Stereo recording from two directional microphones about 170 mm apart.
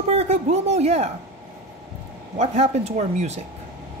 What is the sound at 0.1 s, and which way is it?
Speech, 40° right (ahead or behind).